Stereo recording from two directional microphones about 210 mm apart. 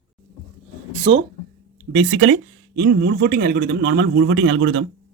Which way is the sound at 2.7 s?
50° right (ahead or behind).